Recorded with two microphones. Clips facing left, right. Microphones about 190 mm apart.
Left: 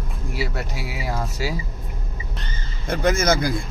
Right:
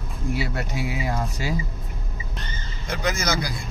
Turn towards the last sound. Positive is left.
turn(degrees=55)  # may be behind; listen again after turning